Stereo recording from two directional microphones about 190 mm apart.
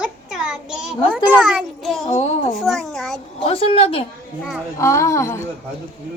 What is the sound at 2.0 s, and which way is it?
Speech, 35° left (ahead or behind).